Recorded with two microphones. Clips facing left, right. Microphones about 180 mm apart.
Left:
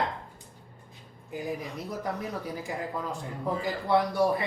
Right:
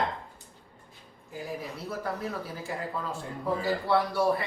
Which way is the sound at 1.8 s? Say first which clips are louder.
Right 1 dB; 15° left (ahead or behind).